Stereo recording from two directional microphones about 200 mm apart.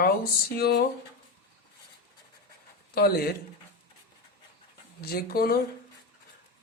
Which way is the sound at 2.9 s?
50° left (ahead or behind).